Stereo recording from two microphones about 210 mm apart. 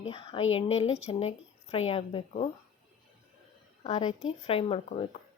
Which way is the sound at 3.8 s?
25° left (ahead or behind).